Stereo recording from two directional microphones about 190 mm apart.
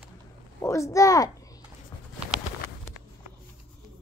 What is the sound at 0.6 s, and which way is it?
Speech, 15° left (ahead or behind).